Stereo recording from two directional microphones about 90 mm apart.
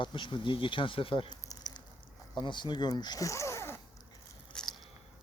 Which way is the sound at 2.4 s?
60° left (ahead or behind).